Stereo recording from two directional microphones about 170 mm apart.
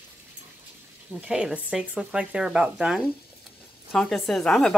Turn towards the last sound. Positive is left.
turn(degrees=5)  # may be behind; listen again after turning